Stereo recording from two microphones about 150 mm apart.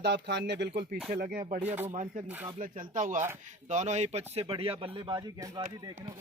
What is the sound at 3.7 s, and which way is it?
Speech, 50° right (ahead or behind).